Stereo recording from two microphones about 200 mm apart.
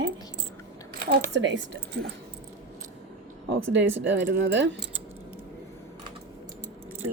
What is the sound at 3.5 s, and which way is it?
A woman's voice, 60° right (ahead or behind).